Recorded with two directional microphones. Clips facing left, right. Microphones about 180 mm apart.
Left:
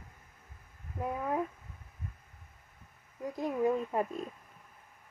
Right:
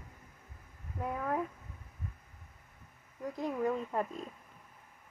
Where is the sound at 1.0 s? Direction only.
10° left (ahead or behind).